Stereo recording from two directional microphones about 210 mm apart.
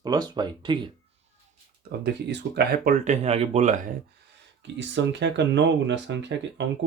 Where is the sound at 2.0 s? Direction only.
55° right (ahead or behind).